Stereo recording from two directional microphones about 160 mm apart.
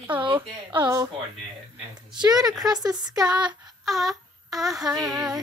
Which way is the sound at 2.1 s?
25° right (ahead or behind).